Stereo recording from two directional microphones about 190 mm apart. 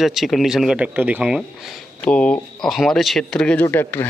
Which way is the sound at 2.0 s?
5° left (ahead or behind).